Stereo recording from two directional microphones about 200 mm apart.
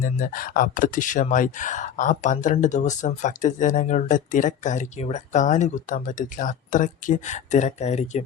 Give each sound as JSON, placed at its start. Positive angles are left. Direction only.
{"t": 0.0, "sound": "speech", "side_deg": 45}